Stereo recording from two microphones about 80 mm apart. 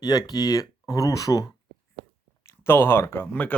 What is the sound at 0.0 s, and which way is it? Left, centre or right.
Speech, left.